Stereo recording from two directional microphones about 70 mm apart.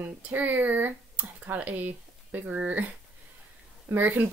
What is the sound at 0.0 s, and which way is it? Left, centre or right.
Speech, right.